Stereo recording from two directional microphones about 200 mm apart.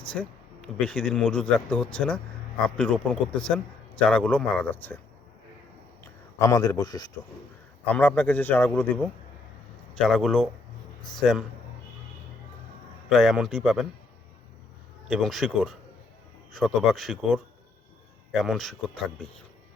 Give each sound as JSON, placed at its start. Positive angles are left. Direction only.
{"t": 0.1, "sound": "speech", "side_deg": 5}
{"t": 6.4, "sound": "a man's voice", "side_deg": 15}
{"t": 7.9, "sound": "a man's voice", "side_deg": 5}
{"t": 13.1, "sound": "speech", "side_deg": 0}
{"t": 15.0, "sound": "speech", "side_deg": 0}